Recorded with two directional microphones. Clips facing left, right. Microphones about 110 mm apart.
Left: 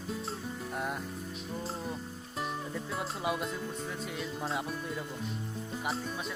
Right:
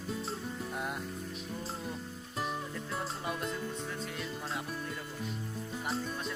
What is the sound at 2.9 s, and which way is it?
Music, 5° left (ahead or behind).